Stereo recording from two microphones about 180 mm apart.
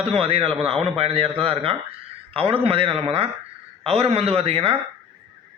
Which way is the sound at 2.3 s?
30° right (ahead or behind).